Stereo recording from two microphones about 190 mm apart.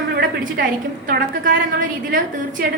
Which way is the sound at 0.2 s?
50° right (ahead or behind).